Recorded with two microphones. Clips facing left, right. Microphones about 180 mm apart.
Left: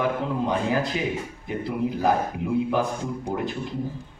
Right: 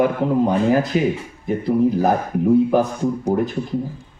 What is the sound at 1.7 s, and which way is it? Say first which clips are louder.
A man's voice: right 7 dB; 45° right (ahead or behind).